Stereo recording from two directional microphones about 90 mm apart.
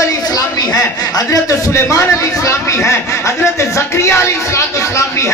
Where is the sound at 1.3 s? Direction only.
35° left (ahead or behind).